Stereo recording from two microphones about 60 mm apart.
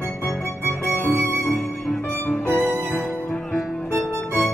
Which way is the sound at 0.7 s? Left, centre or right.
Left.